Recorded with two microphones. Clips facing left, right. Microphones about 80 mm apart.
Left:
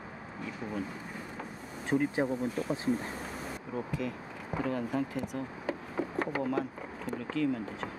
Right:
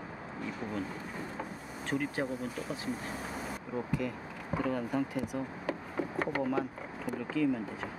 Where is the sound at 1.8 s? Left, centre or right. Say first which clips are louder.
Left 5 dB; centre.